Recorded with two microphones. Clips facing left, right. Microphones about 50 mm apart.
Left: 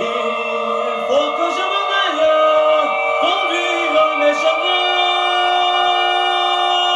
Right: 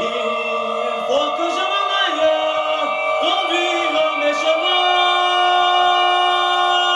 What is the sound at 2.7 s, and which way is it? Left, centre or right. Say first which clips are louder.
Music: left 4 dB; left.